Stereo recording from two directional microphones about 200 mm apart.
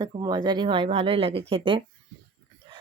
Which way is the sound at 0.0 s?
20° right (ahead or behind).